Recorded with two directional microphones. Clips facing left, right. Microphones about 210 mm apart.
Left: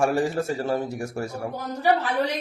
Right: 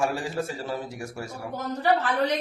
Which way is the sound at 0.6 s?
45° left (ahead or behind).